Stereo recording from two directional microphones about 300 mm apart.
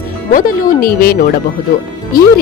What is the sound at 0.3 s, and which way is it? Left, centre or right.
Speech, left.